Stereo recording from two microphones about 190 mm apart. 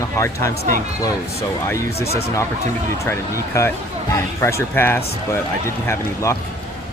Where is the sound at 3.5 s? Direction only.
15° left (ahead or behind).